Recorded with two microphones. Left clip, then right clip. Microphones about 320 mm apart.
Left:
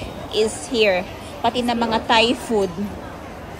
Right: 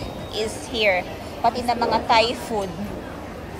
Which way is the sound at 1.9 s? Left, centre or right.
Left.